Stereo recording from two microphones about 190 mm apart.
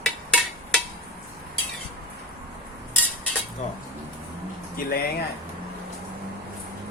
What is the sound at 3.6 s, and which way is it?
Speech, 40° left (ahead or behind).